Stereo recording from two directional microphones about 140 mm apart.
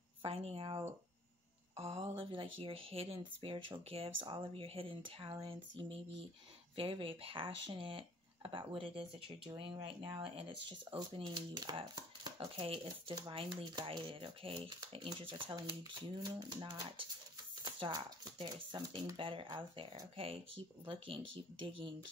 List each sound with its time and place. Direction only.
0.2 s a woman's voice: 40° right (ahead or behind)
12.5 s speech: 40° right (ahead or behind)